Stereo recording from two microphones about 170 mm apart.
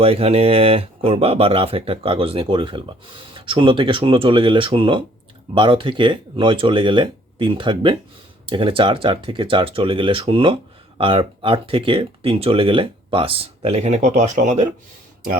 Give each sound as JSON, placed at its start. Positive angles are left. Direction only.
{"t": 0.0, "sound": "speech", "side_deg": -35}